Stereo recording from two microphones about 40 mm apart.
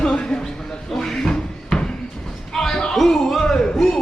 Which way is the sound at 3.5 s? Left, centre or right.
Centre.